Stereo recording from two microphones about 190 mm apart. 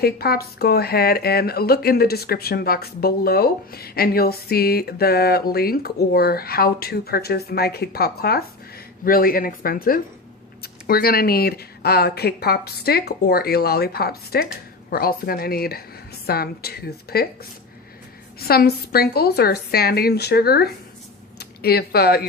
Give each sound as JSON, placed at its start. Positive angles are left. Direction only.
{"t": 0.0, "sound": "speech", "side_deg": 55}
{"t": 18.3, "sound": "speech", "side_deg": 55}